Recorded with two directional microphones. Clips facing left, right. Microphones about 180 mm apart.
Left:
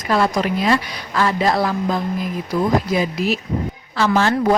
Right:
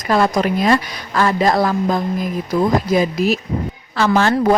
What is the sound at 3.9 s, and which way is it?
Speech, 55° right (ahead or behind).